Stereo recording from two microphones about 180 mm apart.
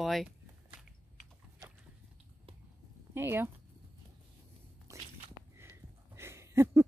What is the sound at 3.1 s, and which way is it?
Speech, 10° right (ahead or behind).